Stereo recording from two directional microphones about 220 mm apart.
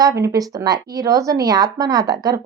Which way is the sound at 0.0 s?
15° right (ahead or behind).